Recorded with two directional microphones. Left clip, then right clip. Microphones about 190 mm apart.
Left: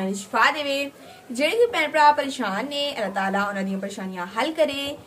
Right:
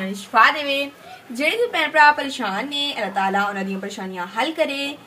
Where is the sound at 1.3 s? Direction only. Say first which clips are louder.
Even; 30° left (ahead or behind).